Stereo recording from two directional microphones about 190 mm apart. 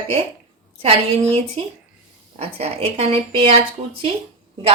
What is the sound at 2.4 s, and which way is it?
Speech, 35° right (ahead or behind).